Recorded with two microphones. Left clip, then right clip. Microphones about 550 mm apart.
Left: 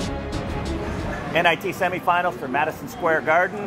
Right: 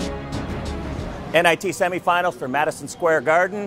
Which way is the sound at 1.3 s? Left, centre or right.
Right.